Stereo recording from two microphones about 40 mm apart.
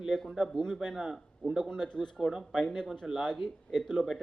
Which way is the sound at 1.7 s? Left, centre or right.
Centre.